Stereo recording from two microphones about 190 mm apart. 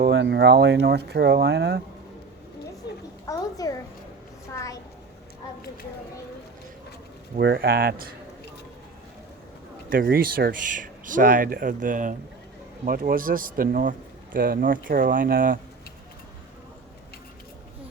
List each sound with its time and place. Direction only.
0.0 s speech: 65° right (ahead or behind)
3.2 s a sound: 20° left (ahead or behind)
7.3 s speech: 55° right (ahead or behind)
9.9 s speech: 50° right (ahead or behind)